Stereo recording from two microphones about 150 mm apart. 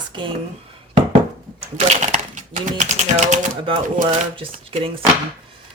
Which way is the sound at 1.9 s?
50° right (ahead or behind).